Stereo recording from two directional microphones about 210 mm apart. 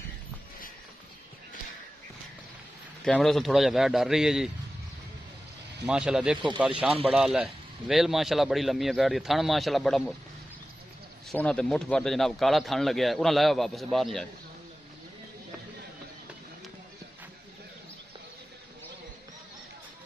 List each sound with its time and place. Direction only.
3.1 s speech: centre (ahead or behind)
5.9 s speech: 5° right (ahead or behind)
6.9 s speech: 25° right (ahead or behind)
7.2 s speech: centre (ahead or behind)
11.2 s speech: 5° left (ahead or behind)